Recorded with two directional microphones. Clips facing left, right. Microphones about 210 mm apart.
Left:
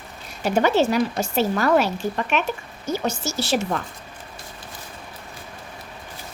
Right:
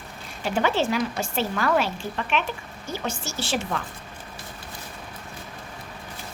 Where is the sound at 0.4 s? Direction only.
40° left (ahead or behind).